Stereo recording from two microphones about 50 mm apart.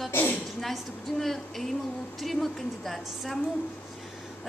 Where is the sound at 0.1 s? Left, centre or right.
Left.